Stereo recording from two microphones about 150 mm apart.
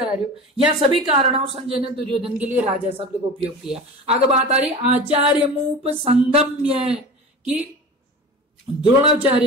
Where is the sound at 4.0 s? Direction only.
45° right (ahead or behind).